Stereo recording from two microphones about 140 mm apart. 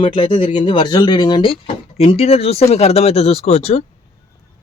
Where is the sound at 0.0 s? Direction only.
35° left (ahead or behind).